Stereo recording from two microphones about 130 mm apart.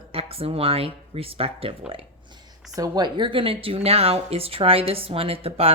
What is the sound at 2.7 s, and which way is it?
Speech, 30° right (ahead or behind).